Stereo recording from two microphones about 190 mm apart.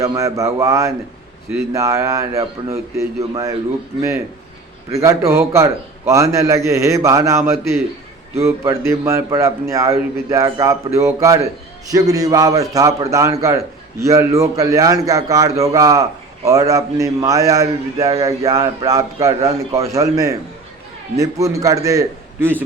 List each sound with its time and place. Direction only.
0.0 s a man's voice: 15° right (ahead or behind)
4.9 s a man's voice: 15° right (ahead or behind)